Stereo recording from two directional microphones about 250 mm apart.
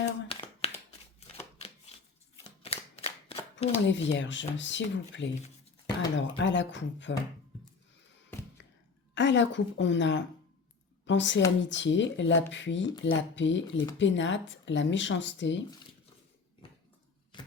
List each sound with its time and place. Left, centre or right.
0.0 s a sound: left
1.2 s shuffling cards: left
2.4 s shuffling cards: left
3.8 s speech: left
9.1 s a woman's voice: left
16.6 s a sound: left